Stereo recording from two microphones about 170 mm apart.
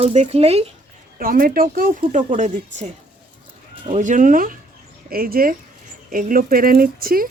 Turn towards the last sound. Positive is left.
turn(degrees=-60)  # may be behind; listen again after turning